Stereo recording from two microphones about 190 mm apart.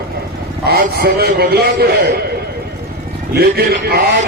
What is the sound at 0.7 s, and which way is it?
A man's voice, 55° right (ahead or behind).